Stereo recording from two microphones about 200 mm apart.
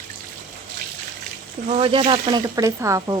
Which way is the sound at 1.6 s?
30° right (ahead or behind).